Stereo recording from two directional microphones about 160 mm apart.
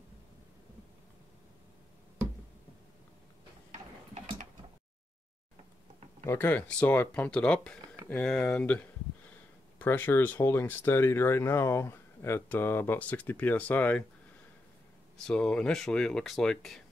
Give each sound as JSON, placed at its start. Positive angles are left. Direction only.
{"t": 4.1, "sound": "a sound", "side_deg": -45}
{"t": 6.2, "sound": "speech", "side_deg": 10}
{"t": 15.2, "sound": "speech", "side_deg": 5}